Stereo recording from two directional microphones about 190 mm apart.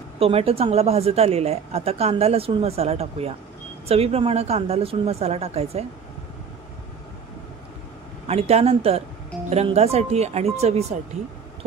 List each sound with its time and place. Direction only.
0.2 s speech: 30° right (ahead or behind)
8.3 s speech: 35° right (ahead or behind)